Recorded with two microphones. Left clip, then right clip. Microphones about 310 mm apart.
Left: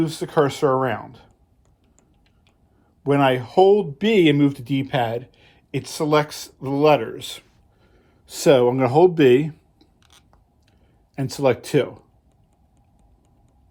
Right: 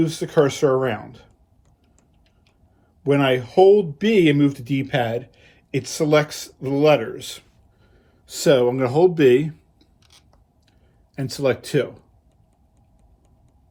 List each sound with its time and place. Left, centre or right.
0.0 s speech: centre
3.0 s speech: centre
11.1 s speech: centre